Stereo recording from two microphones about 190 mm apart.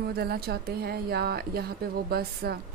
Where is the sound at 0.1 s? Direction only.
55° right (ahead or behind).